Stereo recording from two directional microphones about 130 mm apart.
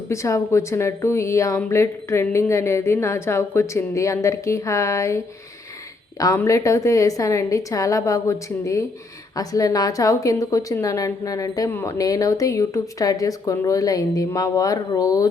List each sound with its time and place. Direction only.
0.1 s speech: 25° left (ahead or behind)
6.3 s speech: 20° left (ahead or behind)